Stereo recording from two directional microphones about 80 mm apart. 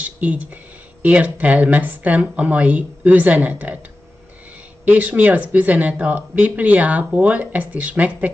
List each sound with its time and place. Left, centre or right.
0.0 s speech: centre
4.8 s speech: centre